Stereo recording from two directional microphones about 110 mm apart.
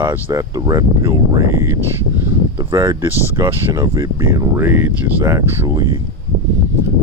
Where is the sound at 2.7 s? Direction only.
40° right (ahead or behind).